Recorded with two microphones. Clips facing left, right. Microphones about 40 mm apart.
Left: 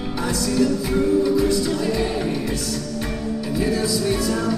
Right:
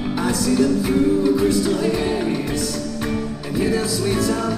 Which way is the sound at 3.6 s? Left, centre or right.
Centre.